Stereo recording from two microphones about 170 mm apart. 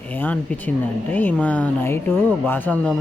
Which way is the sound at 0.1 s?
10° left (ahead or behind).